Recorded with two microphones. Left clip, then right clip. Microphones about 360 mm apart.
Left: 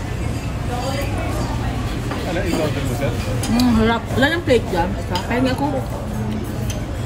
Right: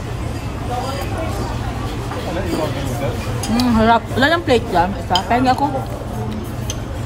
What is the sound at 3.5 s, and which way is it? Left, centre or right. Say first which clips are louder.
Speech: right 4 dB; centre.